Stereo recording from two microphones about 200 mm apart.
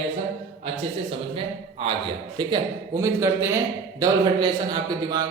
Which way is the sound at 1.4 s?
25° right (ahead or behind).